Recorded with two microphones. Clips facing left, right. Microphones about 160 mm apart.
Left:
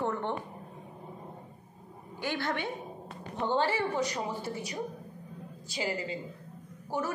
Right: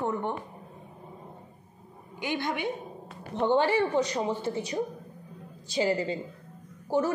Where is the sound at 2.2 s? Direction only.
20° right (ahead or behind).